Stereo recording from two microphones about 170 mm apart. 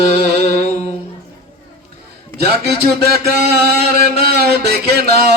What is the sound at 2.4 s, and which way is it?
Music, 70° right (ahead or behind).